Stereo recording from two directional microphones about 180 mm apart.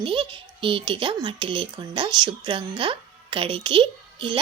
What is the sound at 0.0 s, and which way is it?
Speech, 30° right (ahead or behind).